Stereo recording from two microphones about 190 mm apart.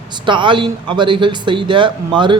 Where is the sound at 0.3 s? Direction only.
25° right (ahead or behind).